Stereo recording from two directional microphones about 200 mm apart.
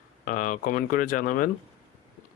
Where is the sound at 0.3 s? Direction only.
40° left (ahead or behind).